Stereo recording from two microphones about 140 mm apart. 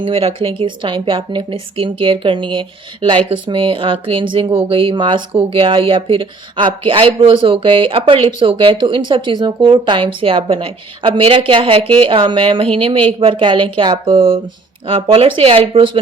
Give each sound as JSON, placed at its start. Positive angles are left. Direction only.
{"t": 0.0, "sound": "speech", "side_deg": -45}